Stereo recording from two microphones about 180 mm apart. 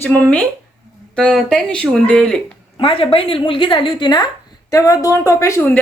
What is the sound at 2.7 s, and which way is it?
A woman's voice, 30° left (ahead or behind).